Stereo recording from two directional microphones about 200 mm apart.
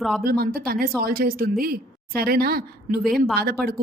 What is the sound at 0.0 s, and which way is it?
Speech, centre (ahead or behind).